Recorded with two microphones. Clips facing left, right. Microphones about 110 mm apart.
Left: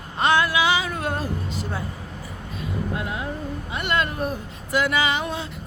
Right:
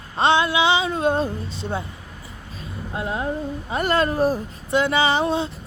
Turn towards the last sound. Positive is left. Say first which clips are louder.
# right 5 dB
turn(degrees=-30)  # may be behind; listen again after turning